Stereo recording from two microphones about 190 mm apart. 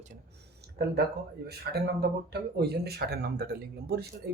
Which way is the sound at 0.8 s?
60° right (ahead or behind).